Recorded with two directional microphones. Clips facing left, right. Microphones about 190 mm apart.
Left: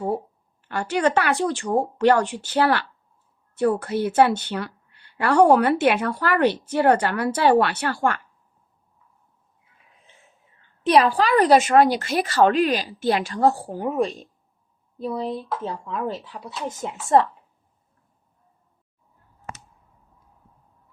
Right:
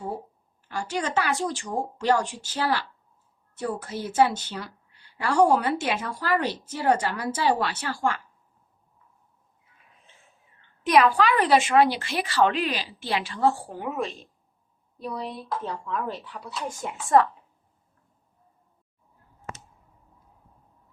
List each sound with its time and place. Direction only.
0.7 s a woman's voice: 65° left (ahead or behind)
10.8 s a woman's voice: 30° left (ahead or behind)
15.0 s speech: 25° left (ahead or behind)